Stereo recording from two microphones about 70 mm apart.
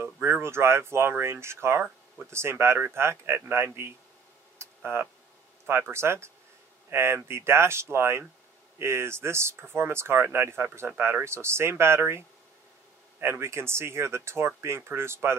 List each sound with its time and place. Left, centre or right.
0.0 s speech: right
4.6 s tick-tock: right
5.7 s speech: right